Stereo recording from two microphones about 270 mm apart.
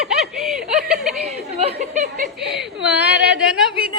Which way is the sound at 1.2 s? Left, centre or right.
Right.